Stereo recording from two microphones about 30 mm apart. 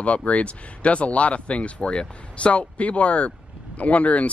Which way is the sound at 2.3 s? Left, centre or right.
Left.